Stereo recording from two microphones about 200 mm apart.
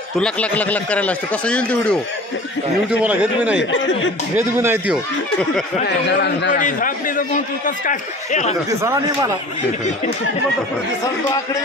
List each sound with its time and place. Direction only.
0.2 s speech: 5° left (ahead or behind)
2.9 s speech: 5° right (ahead or behind)
3.5 s speech: 65° left (ahead or behind)
4.4 s speech: 10° right (ahead or behind)
5.9 s a man's voice: 60° left (ahead or behind)
6.6 s a man's voice: 40° left (ahead or behind)
8.6 s speech: 15° right (ahead or behind)